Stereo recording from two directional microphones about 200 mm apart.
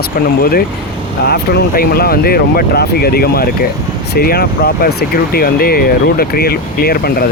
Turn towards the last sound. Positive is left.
turn(degrees=50)  # may be behind; listen again after turning